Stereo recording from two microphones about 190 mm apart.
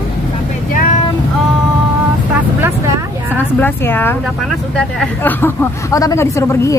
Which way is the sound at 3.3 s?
10° left (ahead or behind).